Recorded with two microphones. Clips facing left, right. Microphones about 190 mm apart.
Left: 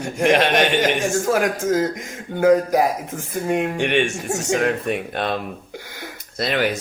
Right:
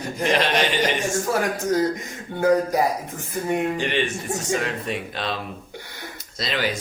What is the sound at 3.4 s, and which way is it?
Speech, 80° left.